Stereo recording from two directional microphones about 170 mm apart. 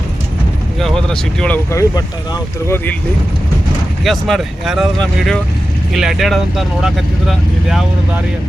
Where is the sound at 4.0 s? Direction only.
Centre (ahead or behind).